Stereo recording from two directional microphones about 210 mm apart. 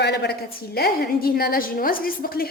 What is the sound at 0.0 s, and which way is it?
A woman's voice, 50° left (ahead or behind).